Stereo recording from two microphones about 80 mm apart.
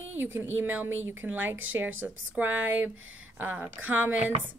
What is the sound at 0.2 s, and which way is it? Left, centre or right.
A woman's voice, right.